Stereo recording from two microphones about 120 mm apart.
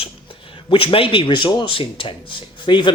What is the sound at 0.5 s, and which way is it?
Speech, 45° left (ahead or behind).